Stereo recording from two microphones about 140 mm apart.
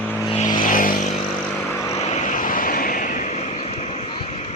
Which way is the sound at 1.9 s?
50° left (ahead or behind).